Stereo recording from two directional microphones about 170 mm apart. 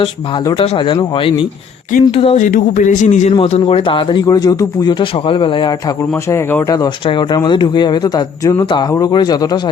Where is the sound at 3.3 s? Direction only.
35° left (ahead or behind).